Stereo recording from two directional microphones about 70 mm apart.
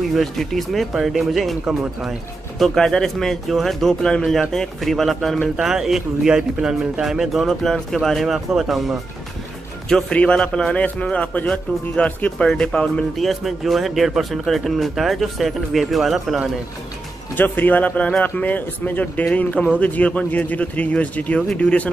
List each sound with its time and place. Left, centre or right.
0.1 s speech: centre
2.6 s speech: centre
9.8 s a man's voice: centre
17.4 s speech: left